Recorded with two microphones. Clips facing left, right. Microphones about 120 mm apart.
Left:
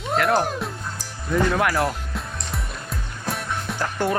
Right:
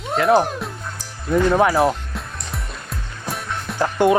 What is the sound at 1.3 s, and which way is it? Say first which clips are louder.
Speech: right 5 dB; 25° right (ahead or behind).